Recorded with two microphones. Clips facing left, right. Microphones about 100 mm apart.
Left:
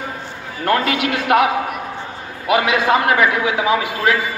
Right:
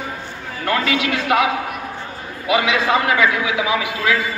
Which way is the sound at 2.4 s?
45° left (ahead or behind).